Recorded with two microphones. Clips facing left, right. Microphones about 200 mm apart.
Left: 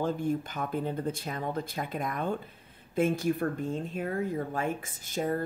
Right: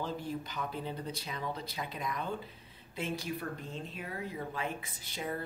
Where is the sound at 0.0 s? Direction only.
50° left (ahead or behind).